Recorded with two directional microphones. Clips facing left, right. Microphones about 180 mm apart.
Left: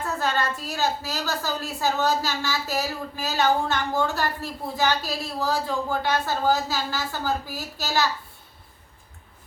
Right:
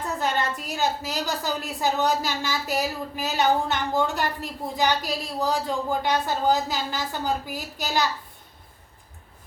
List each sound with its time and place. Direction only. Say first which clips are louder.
0.0 s a woman's voice: even; 20° right (ahead or behind)